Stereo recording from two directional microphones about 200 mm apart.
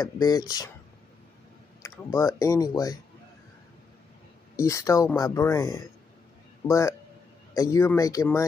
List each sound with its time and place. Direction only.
0.0 s speech: 20° left (ahead or behind)
1.8 s speech: 15° left (ahead or behind)
4.6 s speech: 15° left (ahead or behind)